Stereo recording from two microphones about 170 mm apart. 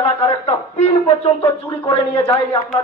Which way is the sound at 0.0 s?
35° left (ahead or behind).